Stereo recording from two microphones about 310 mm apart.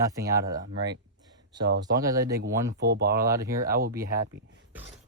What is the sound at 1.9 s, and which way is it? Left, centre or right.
Speech, centre.